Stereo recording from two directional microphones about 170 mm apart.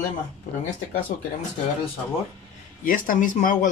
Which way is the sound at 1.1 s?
50° left (ahead or behind).